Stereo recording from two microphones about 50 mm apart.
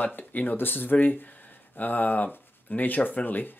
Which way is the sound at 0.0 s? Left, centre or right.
Left.